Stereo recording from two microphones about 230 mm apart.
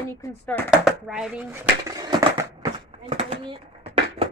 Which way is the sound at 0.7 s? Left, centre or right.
Centre.